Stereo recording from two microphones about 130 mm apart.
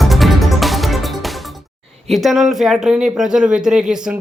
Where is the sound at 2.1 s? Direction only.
Centre (ahead or behind).